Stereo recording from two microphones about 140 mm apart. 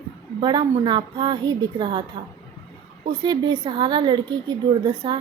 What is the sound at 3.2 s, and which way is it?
A woman's voice, 30° right (ahead or behind).